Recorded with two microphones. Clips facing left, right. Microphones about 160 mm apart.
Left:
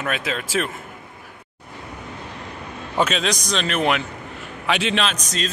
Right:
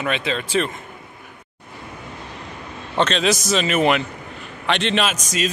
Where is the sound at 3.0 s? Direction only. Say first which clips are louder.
Right 2 dB; 5° left (ahead or behind).